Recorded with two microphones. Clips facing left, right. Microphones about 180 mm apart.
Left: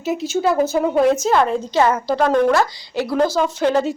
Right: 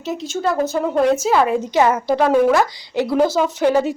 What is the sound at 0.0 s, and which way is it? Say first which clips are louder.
A woman's voice: left 3 dB; 5° left (ahead or behind).